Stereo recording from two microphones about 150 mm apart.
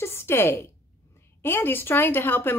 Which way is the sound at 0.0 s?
15° left (ahead or behind).